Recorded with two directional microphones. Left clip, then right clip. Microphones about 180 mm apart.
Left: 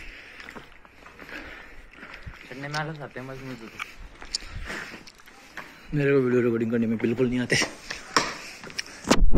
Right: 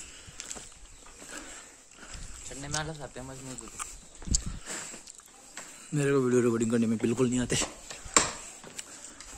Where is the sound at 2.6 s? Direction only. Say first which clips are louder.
Left 4 dB; 15° right (ahead or behind).